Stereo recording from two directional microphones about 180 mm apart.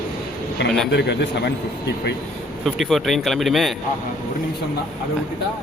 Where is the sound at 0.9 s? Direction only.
70° left (ahead or behind).